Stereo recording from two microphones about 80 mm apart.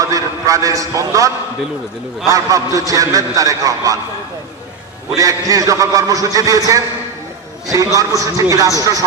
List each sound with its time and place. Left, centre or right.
0.0 s a man's voice: right
5.1 s a man's voice: right